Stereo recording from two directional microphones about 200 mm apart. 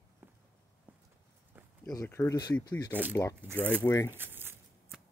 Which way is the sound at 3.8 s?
15° left (ahead or behind).